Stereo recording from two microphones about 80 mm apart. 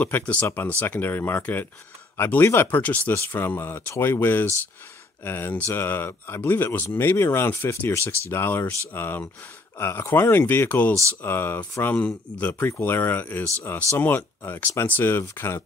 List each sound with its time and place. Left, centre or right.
0.0 s speech: left